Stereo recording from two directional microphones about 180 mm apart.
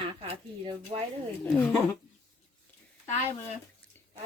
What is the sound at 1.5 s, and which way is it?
Speech, 5° left (ahead or behind).